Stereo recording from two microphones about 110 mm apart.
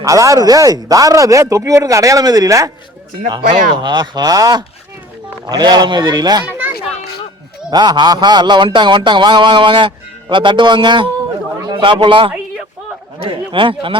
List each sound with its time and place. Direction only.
0.0 s speech: 30° right (ahead or behind)
3.2 s speech: 45° right (ahead or behind)
7.7 s a man's voice: 40° right (ahead or behind)
13.5 s speech: 50° right (ahead or behind)